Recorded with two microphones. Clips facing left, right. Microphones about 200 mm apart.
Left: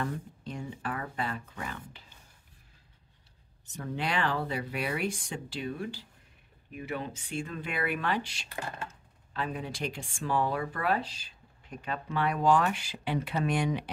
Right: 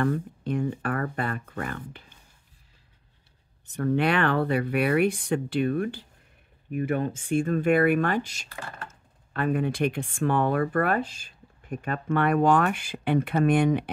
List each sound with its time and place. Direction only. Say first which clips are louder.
0.0 s speech: right 9 dB; 60° right (ahead or behind)
3.6 s speech: right 10 dB; 60° right (ahead or behind); by 8.5 s 45° right (ahead or behind)
9.3 s speech: right 9 dB; 55° right (ahead or behind)